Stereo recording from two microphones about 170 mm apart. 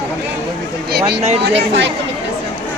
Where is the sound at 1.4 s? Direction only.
90° right.